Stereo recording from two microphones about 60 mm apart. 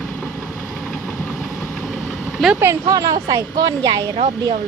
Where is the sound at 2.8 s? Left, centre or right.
Right.